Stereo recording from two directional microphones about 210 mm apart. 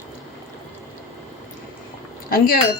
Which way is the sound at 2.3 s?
45° left (ahead or behind).